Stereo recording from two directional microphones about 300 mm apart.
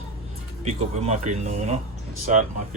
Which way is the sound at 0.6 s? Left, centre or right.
Right.